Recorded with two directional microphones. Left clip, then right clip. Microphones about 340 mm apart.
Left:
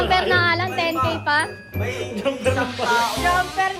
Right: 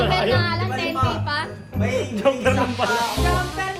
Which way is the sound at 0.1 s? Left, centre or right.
Left.